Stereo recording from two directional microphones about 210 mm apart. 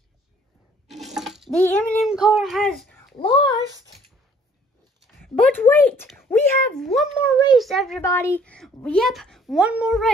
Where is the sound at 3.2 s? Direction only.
20° left (ahead or behind).